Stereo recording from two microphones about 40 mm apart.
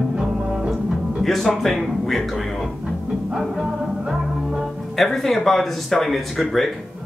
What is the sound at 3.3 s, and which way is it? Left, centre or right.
Music, centre.